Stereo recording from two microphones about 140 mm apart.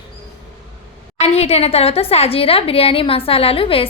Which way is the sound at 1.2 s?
50° left (ahead or behind).